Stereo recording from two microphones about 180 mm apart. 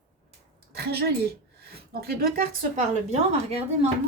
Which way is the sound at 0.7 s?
60° right (ahead or behind).